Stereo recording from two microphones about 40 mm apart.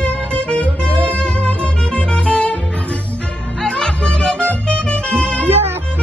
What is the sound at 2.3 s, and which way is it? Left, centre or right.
Music, left.